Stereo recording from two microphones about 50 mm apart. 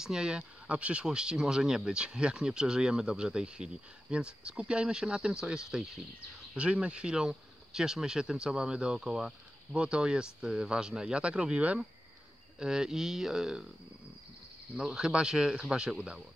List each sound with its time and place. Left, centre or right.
0.0 s speech: centre
12.5 s speech: centre
14.8 s speech: centre